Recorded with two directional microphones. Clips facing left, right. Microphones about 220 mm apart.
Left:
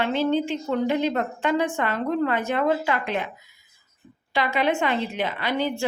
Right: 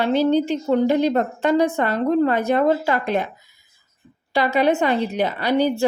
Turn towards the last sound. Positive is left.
turn(degrees=-40)  # may be behind; listen again after turning